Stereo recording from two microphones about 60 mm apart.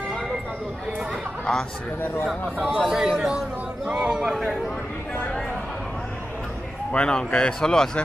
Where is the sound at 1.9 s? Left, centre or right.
Left.